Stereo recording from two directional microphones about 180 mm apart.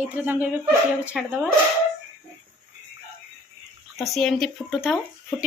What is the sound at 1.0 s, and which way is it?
Speech, 5° right (ahead or behind).